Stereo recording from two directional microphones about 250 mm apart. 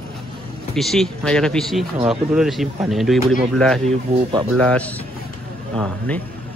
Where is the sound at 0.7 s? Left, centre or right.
Centre.